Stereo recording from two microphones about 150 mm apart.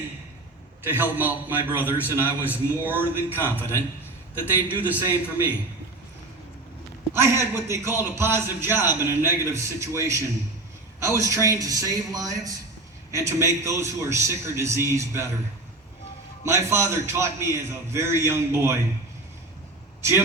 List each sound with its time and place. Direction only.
0.9 s a man's voice: 15° right (ahead or behind)
2.4 s speech: 15° left (ahead or behind)
4.8 s a man's voice: 10° right (ahead or behind)
7.1 s a man's voice: 15° right (ahead or behind)
16.5 s a man's voice: 15° right (ahead or behind)
20.0 s speech: 15° right (ahead or behind)